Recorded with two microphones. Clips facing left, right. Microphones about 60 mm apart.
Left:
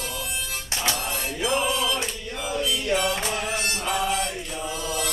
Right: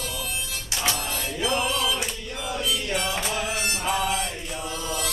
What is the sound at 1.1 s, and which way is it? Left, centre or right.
Music, centre.